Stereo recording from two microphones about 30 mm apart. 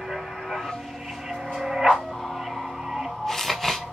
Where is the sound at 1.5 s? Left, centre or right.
Centre.